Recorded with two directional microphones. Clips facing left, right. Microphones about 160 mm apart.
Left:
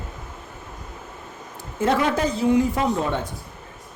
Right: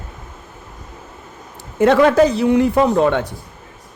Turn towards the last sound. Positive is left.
turn(degrees=-70)  # may be behind; listen again after turning